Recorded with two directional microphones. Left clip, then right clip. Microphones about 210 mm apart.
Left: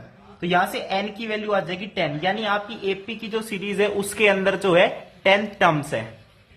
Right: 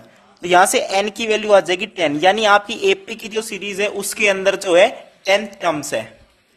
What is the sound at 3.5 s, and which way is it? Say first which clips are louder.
Speech: left 1 dB; 30° right (ahead or behind).